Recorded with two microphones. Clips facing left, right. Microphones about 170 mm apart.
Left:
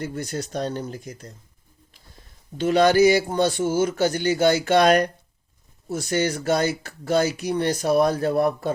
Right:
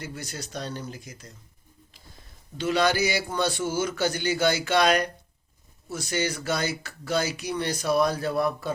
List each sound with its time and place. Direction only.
0.0 s speech: 55° left (ahead or behind)
2.6 s speech: 50° left (ahead or behind)